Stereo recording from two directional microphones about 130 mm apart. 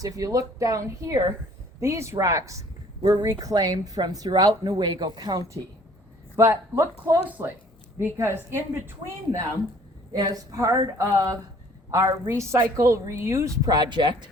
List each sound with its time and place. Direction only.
0.0 s speech: 25° right (ahead or behind)